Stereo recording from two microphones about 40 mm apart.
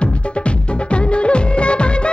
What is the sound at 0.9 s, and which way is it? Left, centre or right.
Music, left.